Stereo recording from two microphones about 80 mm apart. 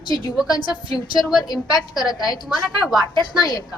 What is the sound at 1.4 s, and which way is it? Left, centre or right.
Speech, left.